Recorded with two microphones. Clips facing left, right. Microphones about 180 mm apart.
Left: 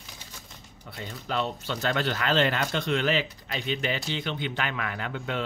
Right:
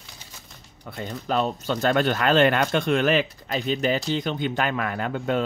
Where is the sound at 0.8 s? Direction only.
50° right (ahead or behind).